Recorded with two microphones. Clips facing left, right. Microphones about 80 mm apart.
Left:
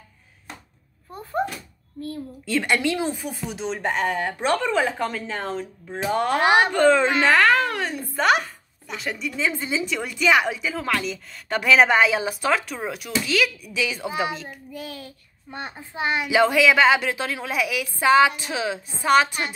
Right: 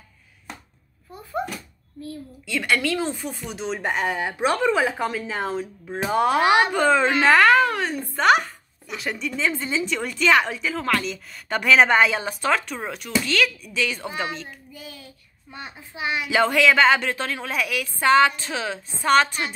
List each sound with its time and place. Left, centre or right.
2.6 s a woman's voice: left
3.3 s a child's voice: centre
14.7 s a child's voice: left
15.9 s a woman's voice: left
16.3 s a woman's voice: centre